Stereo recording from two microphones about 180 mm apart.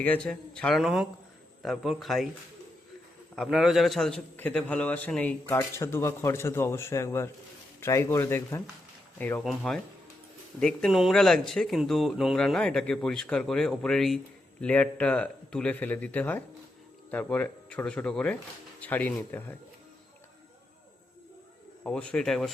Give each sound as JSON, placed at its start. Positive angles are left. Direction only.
{"t": 0.0, "sound": "a man's voice", "side_deg": 5}
{"t": 3.3, "sound": "a man's voice", "side_deg": 0}
{"t": 21.8, "sound": "speech", "side_deg": 5}